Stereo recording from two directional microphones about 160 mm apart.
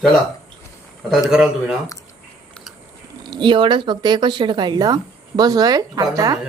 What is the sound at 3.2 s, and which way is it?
Speech, 30° right (ahead or behind).